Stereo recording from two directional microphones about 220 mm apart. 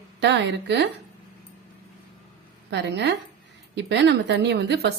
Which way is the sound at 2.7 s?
50° right (ahead or behind).